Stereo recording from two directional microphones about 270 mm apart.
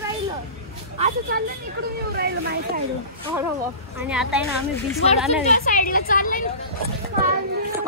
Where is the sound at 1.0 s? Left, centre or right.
Right.